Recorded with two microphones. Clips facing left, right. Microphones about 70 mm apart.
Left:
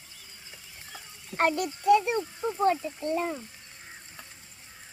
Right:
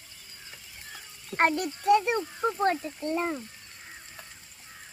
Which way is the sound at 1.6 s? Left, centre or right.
Right.